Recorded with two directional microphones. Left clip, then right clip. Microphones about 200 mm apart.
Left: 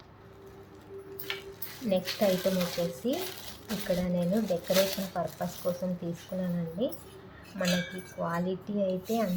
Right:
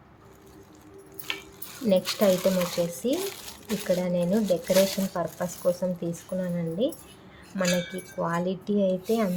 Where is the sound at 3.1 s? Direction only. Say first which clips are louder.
Right 4 dB; 55° right (ahead or behind).